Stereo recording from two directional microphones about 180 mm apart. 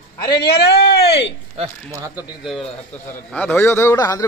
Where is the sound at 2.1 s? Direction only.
Centre (ahead or behind).